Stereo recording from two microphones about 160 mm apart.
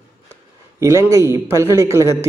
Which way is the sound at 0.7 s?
20° right (ahead or behind).